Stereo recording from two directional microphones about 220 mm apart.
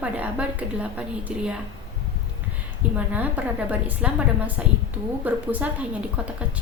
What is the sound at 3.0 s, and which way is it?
A woman's voice, 10° right (ahead or behind).